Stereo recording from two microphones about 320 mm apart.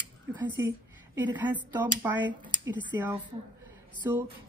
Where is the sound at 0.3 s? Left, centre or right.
Centre.